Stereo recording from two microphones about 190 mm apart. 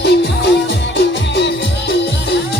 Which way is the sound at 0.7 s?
70° left (ahead or behind).